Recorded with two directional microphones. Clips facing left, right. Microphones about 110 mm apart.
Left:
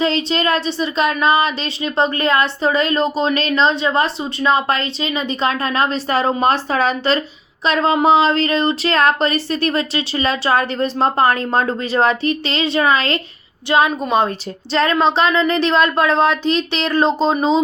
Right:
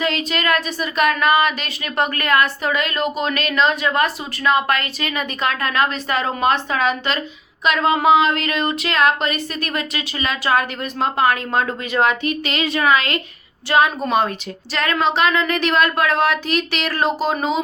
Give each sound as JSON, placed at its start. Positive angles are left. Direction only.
{"t": 0.0, "sound": "a woman's voice", "side_deg": 30}
{"t": 13.7, "sound": "a woman's voice", "side_deg": 20}